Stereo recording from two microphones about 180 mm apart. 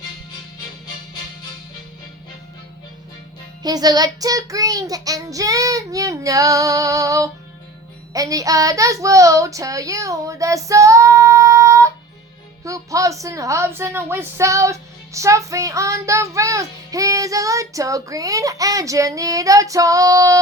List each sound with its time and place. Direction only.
3.6 s child singing: 20° right (ahead or behind)
8.1 s a child's voice: 20° right (ahead or behind)